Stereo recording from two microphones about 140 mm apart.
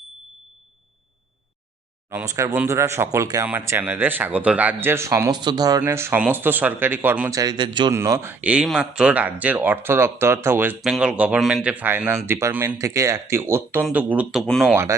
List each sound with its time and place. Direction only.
2.0 s speech: 20° right (ahead or behind)
5.8 s speech: 15° right (ahead or behind); by 7.9 s 35° right (ahead or behind)
7.9 s speech: 20° right (ahead or behind)
10.8 s speech: centre (ahead or behind)
14.7 s speech: 20° right (ahead or behind)